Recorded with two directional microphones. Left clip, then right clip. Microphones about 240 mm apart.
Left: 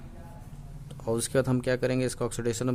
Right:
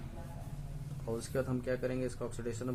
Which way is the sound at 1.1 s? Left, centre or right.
Left.